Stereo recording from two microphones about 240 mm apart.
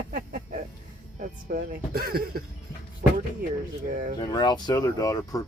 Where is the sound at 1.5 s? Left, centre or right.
Right.